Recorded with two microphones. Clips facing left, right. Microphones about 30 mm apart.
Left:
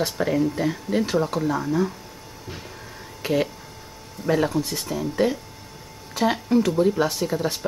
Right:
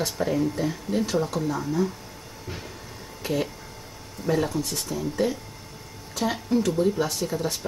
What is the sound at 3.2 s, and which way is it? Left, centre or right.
A woman's voice, centre.